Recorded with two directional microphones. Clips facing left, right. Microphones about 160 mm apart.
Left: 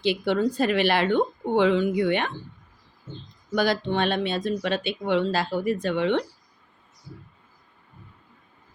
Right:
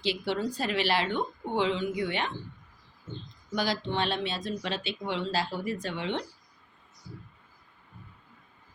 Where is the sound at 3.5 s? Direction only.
55° left (ahead or behind).